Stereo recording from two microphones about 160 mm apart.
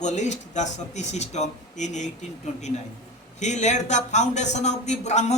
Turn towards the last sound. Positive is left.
turn(degrees=45)  # may be behind; listen again after turning